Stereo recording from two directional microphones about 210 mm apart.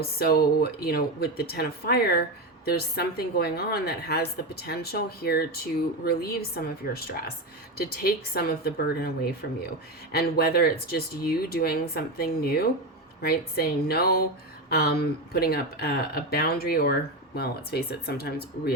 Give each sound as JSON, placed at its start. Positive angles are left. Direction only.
{"t": 0.0, "sound": "speech", "side_deg": 45}